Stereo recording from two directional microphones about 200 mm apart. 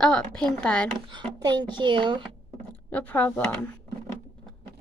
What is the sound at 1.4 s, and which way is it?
Speech, 20° right (ahead or behind).